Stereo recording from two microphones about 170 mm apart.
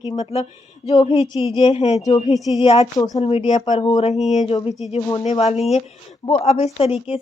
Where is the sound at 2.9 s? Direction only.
20° left (ahead or behind).